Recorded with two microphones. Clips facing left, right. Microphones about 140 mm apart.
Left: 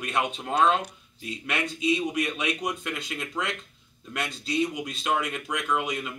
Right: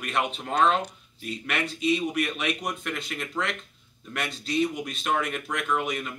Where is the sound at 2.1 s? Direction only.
15° left (ahead or behind).